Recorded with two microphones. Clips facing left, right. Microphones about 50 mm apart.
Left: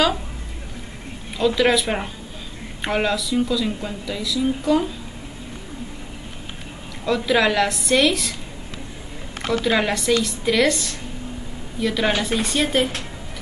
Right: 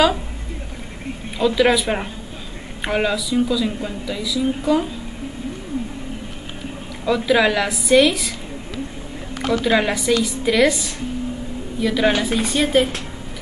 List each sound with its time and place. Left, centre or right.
1.4 s speech: centre
7.1 s speech: centre
9.5 s speech: centre